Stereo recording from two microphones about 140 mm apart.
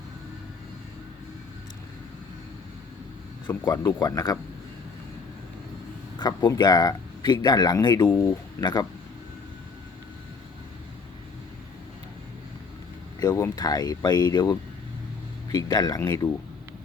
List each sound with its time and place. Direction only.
3.6 s speech: 25° left (ahead or behind)
6.1 s speech: 30° left (ahead or behind)
13.1 s speech: 25° left (ahead or behind)
15.5 s speech: 25° left (ahead or behind)